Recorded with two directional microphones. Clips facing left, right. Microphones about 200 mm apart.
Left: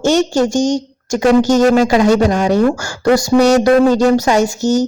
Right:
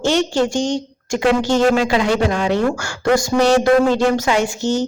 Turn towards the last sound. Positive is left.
turn(degrees=40)  # may be behind; listen again after turning